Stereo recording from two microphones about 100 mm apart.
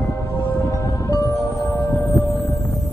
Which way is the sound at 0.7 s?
30° left (ahead or behind).